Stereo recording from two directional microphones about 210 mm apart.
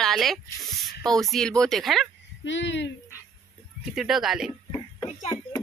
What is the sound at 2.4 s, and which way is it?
Speech, 60° left (ahead or behind).